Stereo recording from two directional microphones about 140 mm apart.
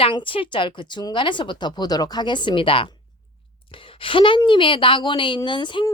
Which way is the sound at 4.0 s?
40° left (ahead or behind).